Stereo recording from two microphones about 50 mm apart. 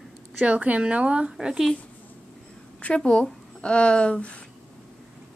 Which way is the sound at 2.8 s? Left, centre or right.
Centre.